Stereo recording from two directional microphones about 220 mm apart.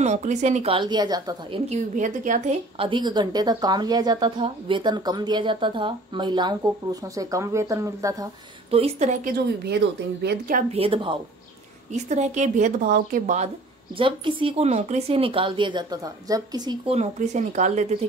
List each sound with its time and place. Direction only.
0.0 s a woman's voice: 30° right (ahead or behind)
1.7 s a woman's voice: 35° right (ahead or behind); by 8.3 s 15° right (ahead or behind)
8.6 s a woman's voice: 25° right (ahead or behind); by 10.6 s 50° right (ahead or behind)
10.7 s a woman's voice: 25° right (ahead or behind)
13.9 s a woman's voice: 25° right (ahead or behind)